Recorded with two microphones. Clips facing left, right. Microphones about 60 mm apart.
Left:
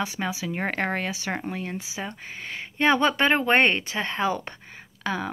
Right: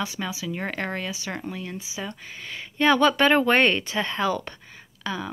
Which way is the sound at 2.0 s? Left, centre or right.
Left.